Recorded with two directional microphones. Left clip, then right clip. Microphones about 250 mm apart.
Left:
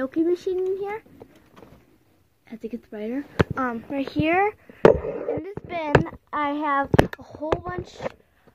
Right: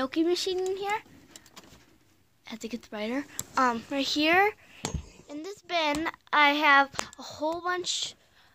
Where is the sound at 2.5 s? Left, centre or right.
Right.